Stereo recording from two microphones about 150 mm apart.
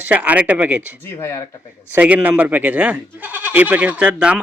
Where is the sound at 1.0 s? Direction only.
15° left (ahead or behind).